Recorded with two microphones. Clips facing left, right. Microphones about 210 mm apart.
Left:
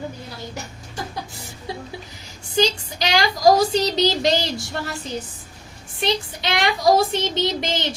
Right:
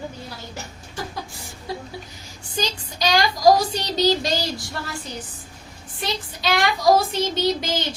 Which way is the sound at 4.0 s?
25° left (ahead or behind).